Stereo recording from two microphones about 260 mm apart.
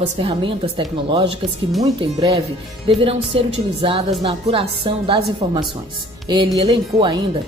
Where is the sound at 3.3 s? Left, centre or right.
Right.